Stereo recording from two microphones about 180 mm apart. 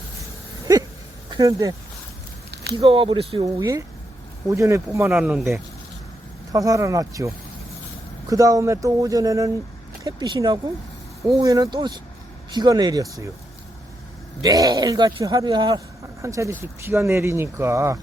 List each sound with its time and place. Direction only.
0.6 s a sound: 20° right (ahead or behind)
1.3 s speech: 20° right (ahead or behind)
2.7 s a man's voice: 30° right (ahead or behind)
3.4 s a man's voice: 20° right (ahead or behind)
5.0 s speech: 5° right (ahead or behind)
6.5 s speech: 20° right (ahead or behind)
8.3 s a man's voice: 20° right (ahead or behind)
14.4 s a man's voice: 20° right (ahead or behind)